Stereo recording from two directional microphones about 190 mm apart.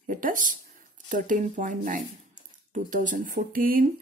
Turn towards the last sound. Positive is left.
turn(degrees=-50)  # may be behind; listen again after turning